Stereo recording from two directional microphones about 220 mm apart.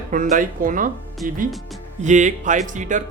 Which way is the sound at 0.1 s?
35° right (ahead or behind).